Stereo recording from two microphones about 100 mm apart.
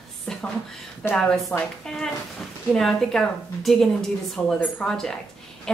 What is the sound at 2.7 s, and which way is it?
A woman's voice, 5° left (ahead or behind).